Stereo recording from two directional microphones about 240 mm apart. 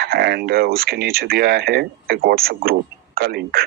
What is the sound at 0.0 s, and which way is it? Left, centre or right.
Speech, right.